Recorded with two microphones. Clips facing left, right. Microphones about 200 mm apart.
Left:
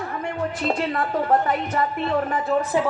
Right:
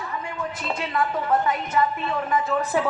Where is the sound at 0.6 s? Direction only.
45° left (ahead or behind).